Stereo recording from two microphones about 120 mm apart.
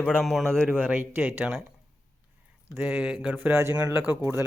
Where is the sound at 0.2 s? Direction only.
Centre (ahead or behind).